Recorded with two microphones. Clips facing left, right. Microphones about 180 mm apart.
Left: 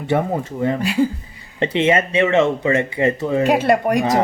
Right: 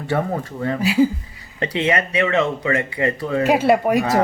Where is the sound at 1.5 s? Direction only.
25° left (ahead or behind).